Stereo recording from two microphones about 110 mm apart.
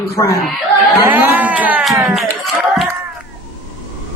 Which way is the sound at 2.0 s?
Centre (ahead or behind).